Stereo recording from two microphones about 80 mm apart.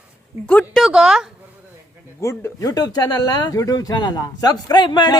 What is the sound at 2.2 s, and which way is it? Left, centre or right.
Speech, left.